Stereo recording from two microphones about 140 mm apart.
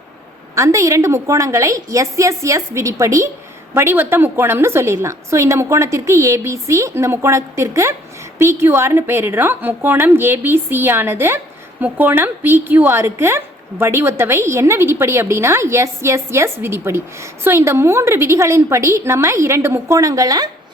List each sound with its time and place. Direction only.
0.5 s a woman's voice: 20° right (ahead or behind)